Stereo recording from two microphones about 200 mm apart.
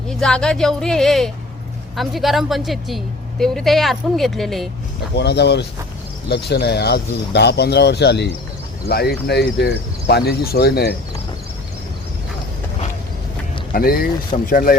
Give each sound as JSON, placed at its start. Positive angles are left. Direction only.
{"t": 0.1, "sound": "a woman's voice", "side_deg": 5}
{"t": 5.1, "sound": "speech", "side_deg": 55}
{"t": 13.7, "sound": "speech", "side_deg": 45}